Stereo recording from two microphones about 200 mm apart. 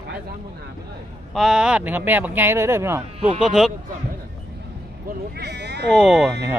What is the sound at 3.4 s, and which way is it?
Speech, centre (ahead or behind).